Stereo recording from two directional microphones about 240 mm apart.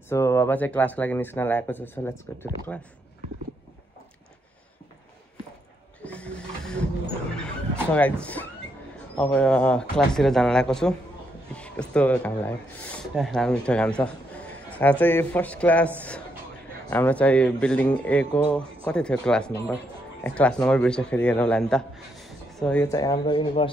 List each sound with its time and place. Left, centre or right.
0.1 s a man's voice: centre
6.0 s printer: centre
7.9 s a man's voice: centre
16.9 s a man's voice: centre